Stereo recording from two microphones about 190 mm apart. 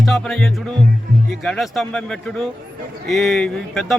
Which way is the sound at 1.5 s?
Centre (ahead or behind).